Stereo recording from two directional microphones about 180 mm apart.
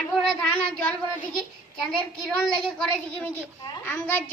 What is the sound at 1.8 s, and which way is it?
A child's voice, 5° left (ahead or behind).